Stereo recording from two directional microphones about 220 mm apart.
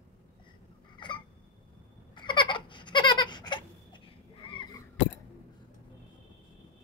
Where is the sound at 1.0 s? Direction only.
20° left (ahead or behind).